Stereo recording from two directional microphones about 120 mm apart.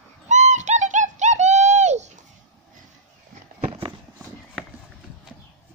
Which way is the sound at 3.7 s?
50° right (ahead or behind).